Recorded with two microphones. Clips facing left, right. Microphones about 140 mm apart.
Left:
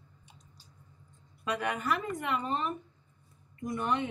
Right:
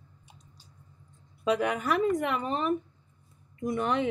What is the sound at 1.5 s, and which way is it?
A woman's voice, 85° right.